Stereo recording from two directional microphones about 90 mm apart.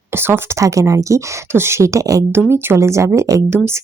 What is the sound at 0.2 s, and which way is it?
Speech, 25° right (ahead or behind).